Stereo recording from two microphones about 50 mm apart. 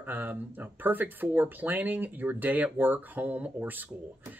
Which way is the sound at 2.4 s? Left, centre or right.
Right.